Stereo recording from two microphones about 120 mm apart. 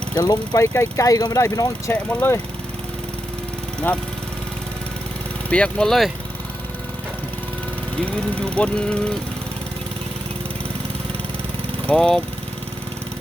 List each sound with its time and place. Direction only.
0.2 s speech: 30° left (ahead or behind)
1.9 s speech: 15° left (ahead or behind)
5.5 s speech: 10° left (ahead or behind)
8.4 s speech: 10° left (ahead or behind)
11.9 s speech: 5° left (ahead or behind)